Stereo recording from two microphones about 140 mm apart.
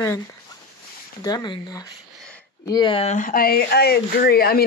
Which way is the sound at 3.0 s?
50° left (ahead or behind).